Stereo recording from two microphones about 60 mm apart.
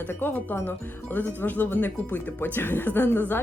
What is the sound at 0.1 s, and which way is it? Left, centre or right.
Speech, left.